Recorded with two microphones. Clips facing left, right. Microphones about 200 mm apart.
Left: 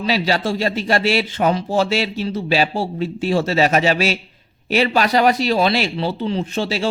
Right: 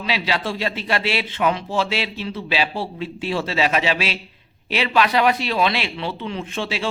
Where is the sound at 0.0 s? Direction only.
40° left (ahead or behind).